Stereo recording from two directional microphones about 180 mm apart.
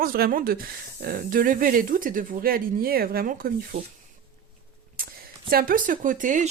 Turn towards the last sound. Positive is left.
turn(degrees=-45)  # may be behind; listen again after turning